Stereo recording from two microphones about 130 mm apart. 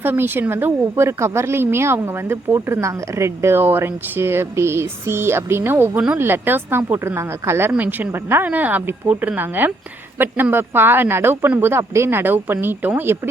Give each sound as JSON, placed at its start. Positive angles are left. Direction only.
{"t": 0.0, "sound": "speech", "side_deg": -15}